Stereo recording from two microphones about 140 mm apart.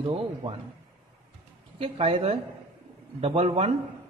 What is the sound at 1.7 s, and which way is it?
A man's voice, 40° right (ahead or behind).